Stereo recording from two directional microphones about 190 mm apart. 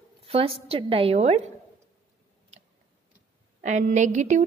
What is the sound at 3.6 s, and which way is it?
Speech, 40° right (ahead or behind).